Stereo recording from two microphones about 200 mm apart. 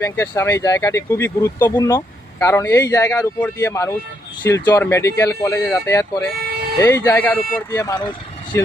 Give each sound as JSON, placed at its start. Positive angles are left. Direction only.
{"t": 0.0, "sound": "speech", "side_deg": 15}
{"t": 6.3, "sound": "a sound", "side_deg": -50}
{"t": 6.7, "sound": "speech", "side_deg": 15}